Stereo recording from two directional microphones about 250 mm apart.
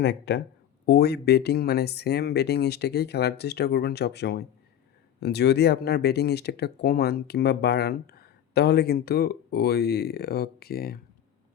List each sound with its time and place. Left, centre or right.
0.0 s speech: left